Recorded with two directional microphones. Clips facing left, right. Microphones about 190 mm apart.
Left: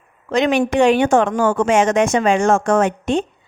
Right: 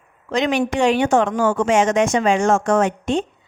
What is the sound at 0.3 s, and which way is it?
Speech, 55° left (ahead or behind).